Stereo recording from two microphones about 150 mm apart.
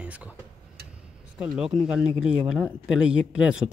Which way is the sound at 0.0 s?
10° right (ahead or behind).